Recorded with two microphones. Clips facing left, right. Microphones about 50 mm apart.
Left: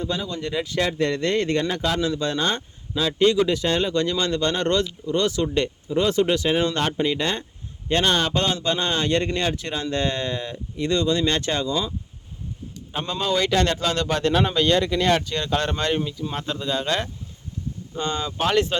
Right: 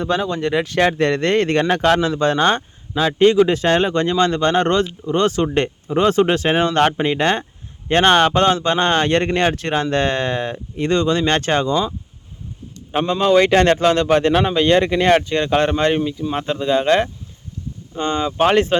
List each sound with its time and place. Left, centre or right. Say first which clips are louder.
0.0 s speech: right 8 dB; right
2.0 s speech: right 7 dB; right
16.0 s speech: right 6 dB; centre
16.3 s speech: right 10 dB; right